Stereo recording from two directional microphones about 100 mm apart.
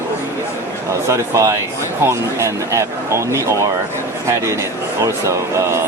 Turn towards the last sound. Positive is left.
turn(degrees=-30)  # may be behind; listen again after turning